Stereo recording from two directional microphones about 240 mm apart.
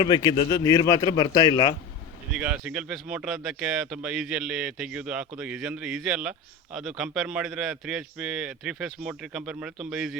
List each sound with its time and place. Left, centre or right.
0.0 s a man's voice: centre
2.3 s speech: centre